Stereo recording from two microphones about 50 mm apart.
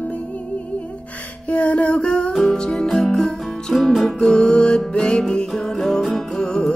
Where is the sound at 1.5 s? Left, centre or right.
Left.